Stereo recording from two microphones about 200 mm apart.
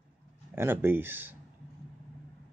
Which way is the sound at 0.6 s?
10° right (ahead or behind).